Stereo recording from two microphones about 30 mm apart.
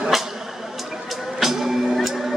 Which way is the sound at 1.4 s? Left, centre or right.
Centre.